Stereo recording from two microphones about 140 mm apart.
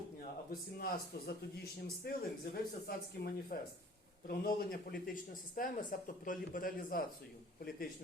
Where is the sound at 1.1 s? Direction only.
90° left.